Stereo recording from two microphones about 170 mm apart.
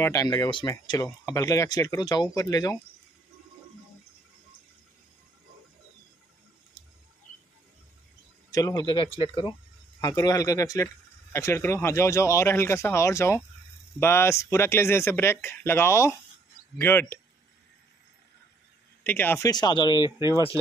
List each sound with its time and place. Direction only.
0.0 s speech: 20° left (ahead or behind)
8.5 s speech: 20° left (ahead or behind)
19.0 s speech: 10° left (ahead or behind)
19.5 s speech: 25° left (ahead or behind)